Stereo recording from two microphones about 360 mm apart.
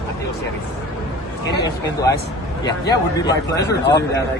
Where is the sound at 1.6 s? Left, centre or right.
Centre.